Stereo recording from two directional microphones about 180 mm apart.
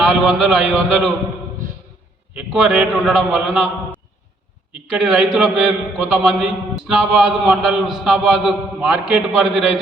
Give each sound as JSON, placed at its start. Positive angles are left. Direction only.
{"t": 0.0, "sound": "a man's voice", "side_deg": -5}
{"t": 2.3, "sound": "a man's voice", "side_deg": -5}
{"t": 4.9, "sound": "a man's voice", "side_deg": -5}